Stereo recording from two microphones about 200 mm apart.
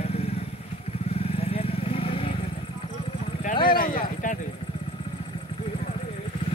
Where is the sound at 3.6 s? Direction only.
45° left (ahead or behind).